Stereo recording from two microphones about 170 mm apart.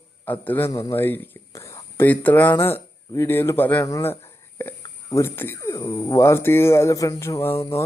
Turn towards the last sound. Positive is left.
turn(degrees=15)  # may be behind; listen again after turning